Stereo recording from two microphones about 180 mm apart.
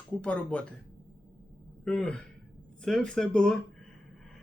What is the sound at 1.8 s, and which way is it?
Speech, 5° left (ahead or behind).